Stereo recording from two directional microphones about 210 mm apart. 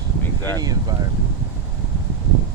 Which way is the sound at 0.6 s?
20° right (ahead or behind).